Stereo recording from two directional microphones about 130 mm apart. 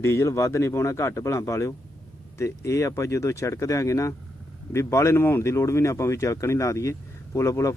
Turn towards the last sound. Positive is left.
turn(degrees=25)  # may be behind; listen again after turning